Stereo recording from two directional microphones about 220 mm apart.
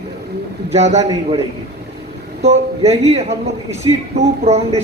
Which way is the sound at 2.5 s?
30° right (ahead or behind).